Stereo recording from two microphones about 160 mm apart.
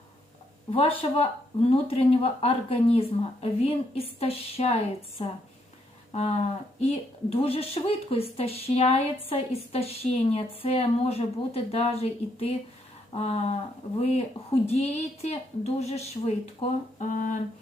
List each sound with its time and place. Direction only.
0.7 s a woman's voice: 35° left (ahead or behind)